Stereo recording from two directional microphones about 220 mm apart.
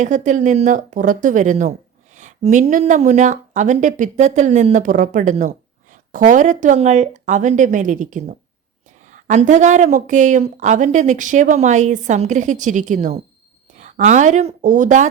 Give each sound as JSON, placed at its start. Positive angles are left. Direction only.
{"t": 0.0, "sound": "speech", "side_deg": -35}